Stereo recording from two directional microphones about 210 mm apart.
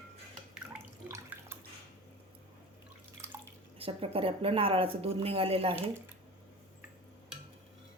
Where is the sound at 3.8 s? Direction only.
25° right (ahead or behind).